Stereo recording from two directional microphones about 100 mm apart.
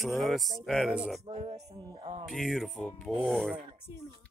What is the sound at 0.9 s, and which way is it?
Speech, 10° right (ahead or behind).